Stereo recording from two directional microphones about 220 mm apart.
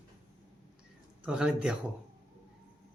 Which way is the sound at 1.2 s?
5° right (ahead or behind).